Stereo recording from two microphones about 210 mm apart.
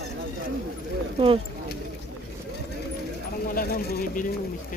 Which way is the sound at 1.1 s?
25° right (ahead or behind).